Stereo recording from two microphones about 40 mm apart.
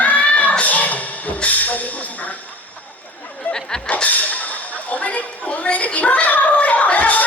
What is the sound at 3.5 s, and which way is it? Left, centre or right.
Snicker, centre.